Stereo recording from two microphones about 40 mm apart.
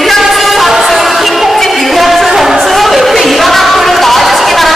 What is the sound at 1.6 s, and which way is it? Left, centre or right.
Music, centre.